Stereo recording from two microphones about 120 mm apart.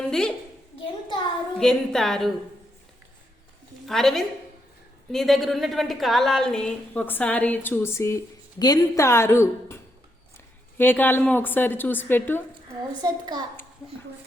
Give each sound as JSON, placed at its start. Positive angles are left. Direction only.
{"t": 0.1, "sound": "a woman's voice", "side_deg": 5}
{"t": 0.8, "sound": "a sound", "side_deg": 40}
{"t": 1.5, "sound": "a woman's voice", "side_deg": 5}
{"t": 3.8, "sound": "a woman's voice", "side_deg": 0}
{"t": 8.5, "sound": "a woman's voice", "side_deg": 35}
{"t": 13.0, "sound": "a child's voice", "side_deg": -35}